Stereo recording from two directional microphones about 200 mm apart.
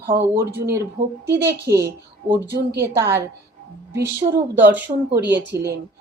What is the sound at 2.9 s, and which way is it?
Speech, 15° right (ahead or behind).